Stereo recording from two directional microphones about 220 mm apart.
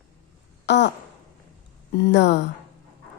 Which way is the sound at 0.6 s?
50° left (ahead or behind).